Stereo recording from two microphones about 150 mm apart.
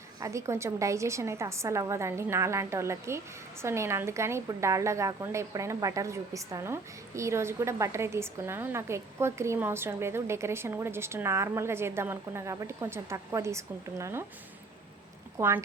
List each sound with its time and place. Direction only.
0.2 s a woman's voice: 20° right (ahead or behind)
15.4 s a woman's voice: 15° right (ahead or behind)